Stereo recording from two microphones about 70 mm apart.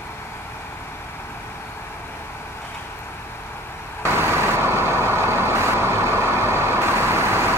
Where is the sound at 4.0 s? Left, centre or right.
Right.